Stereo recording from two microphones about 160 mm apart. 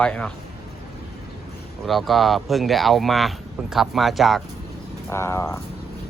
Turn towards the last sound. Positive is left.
turn(degrees=15)  # may be behind; listen again after turning